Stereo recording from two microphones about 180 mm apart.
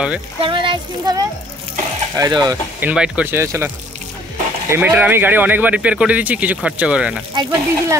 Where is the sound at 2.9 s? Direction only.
5° right (ahead or behind).